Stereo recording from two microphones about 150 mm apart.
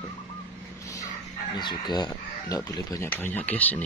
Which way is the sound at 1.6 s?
30° left (ahead or behind).